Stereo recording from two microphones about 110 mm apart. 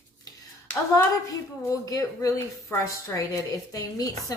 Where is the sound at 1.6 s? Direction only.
30° left (ahead or behind).